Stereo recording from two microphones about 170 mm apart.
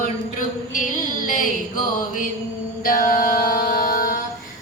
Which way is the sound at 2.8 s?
55° left (ahead or behind).